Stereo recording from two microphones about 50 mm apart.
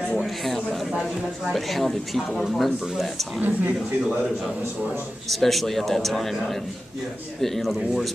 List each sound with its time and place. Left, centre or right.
0.2 s a sound: centre
1.5 s speech: centre
3.3 s speech: right
5.3 s speech: centre